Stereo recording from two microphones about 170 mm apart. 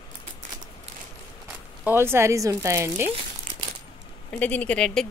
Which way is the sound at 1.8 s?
15° right (ahead or behind).